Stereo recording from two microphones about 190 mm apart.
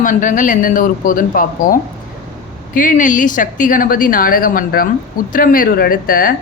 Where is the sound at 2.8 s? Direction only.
45° left (ahead or behind).